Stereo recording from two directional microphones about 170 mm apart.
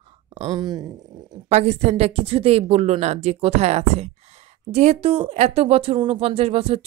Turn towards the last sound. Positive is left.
turn(degrees=-35)  # may be behind; listen again after turning